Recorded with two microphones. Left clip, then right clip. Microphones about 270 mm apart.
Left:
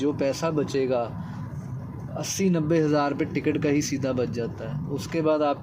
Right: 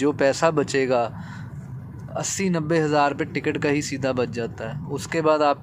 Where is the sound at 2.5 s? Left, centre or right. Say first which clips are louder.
Right 3 dB; centre.